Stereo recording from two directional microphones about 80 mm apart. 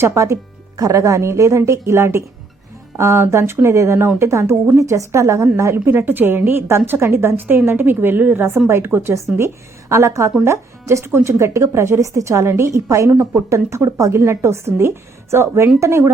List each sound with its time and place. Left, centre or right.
0.0 s a woman's voice: right